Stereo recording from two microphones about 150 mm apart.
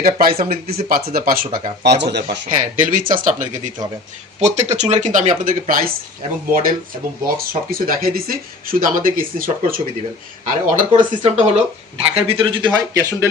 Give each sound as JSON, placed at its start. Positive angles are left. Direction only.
{"t": 0.0, "sound": "speech", "side_deg": -80}
{"t": 2.0, "sound": "speech", "side_deg": -65}
{"t": 4.4, "sound": "speech", "side_deg": -50}
{"t": 10.4, "sound": "speech", "side_deg": -60}